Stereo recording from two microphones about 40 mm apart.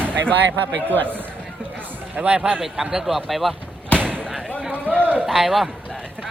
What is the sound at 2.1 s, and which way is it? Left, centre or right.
Speech, right.